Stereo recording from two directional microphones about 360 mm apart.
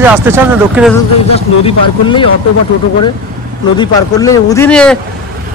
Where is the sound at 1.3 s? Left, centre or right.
Centre.